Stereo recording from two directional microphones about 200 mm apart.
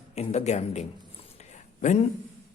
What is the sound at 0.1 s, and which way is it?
Speech, 35° left (ahead or behind).